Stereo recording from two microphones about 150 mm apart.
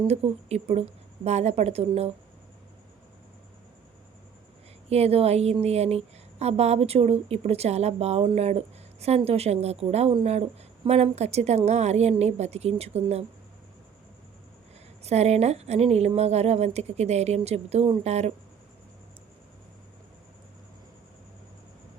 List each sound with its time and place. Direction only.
0.1 s speech: 45° right (ahead or behind)
4.9 s speech: 45° right (ahead or behind)
15.0 s speech: 45° right (ahead or behind)